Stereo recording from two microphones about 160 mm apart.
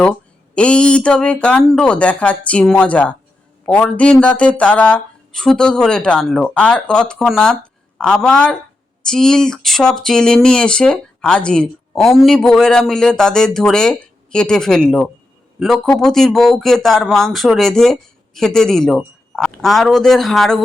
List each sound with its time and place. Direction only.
0.0 s speech: 5° left (ahead or behind)